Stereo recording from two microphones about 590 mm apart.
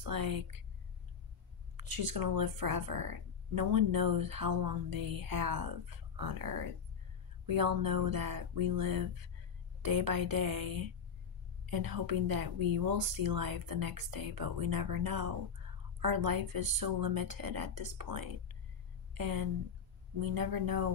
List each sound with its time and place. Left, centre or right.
0.0 s speech: right
1.8 s speech: right